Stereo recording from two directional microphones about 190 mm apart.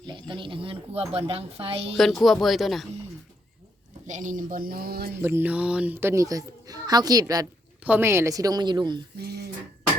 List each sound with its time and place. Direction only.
0.0 s speech: 25° right (ahead or behind)
1.9 s speech: centre (ahead or behind)
4.0 s a woman's voice: 40° right (ahead or behind)
5.2 s speech: 10° right (ahead or behind)
9.1 s a sound: 60° right (ahead or behind)